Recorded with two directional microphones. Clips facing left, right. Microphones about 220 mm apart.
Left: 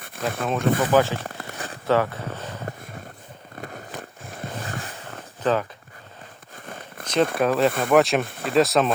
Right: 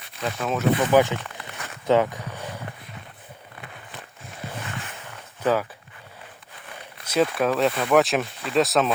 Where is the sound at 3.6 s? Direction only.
45° left (ahead or behind).